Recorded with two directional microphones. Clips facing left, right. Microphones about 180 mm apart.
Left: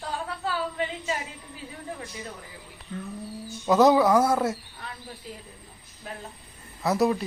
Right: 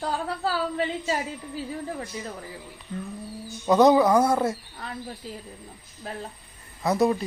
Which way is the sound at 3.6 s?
Centre (ahead or behind).